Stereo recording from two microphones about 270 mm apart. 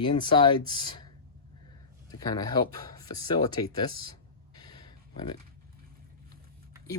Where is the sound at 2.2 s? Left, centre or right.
Centre.